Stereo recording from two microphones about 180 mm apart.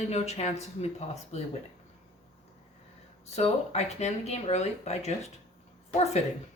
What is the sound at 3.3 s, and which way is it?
Speech, 35° left (ahead or behind).